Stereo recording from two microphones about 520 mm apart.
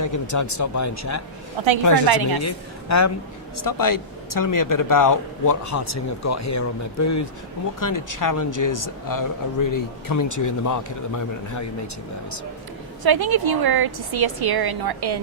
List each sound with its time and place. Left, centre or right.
0.0 s speech: left
1.6 s a woman's voice: right
2.0 s a woman's voice: right
2.4 s speech: left
13.0 s a woman's voice: right